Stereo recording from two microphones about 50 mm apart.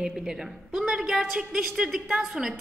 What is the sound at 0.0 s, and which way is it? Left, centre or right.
A woman's voice, centre.